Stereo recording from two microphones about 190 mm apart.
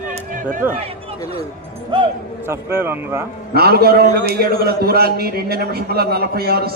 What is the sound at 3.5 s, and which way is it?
A man's voice, 55° right (ahead or behind).